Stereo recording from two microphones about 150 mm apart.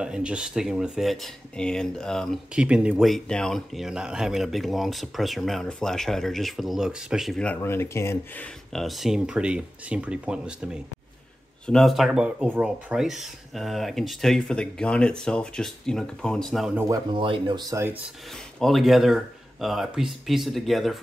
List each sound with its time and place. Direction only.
0.0 s speech: 5° right (ahead or behind); by 8.5 s 15° left (ahead or behind)
8.7 s speech: centre (ahead or behind)
17.1 s speech: 35° right (ahead or behind)
18.6 s speech: centre (ahead or behind)